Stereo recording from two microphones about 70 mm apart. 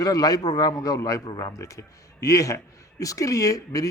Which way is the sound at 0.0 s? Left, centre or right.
Left.